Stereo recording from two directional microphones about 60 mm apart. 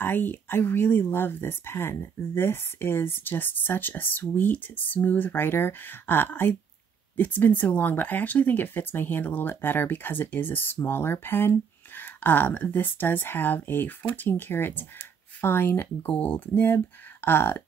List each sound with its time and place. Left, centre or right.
0.0 s speech: left